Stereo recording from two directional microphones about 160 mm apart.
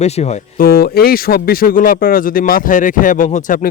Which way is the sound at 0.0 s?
45° left (ahead or behind).